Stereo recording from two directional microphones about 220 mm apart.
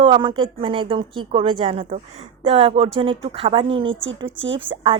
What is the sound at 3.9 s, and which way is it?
Speech, 60° right (ahead or behind).